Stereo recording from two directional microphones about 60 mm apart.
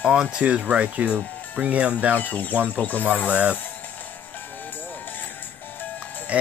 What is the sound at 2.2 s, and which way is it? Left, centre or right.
Speech, left.